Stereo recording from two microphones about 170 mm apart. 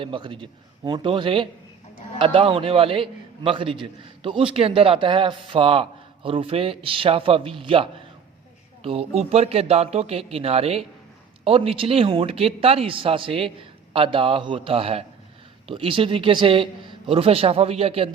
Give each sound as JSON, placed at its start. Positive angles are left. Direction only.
{"t": 0.0, "sound": "a man's voice", "side_deg": -30}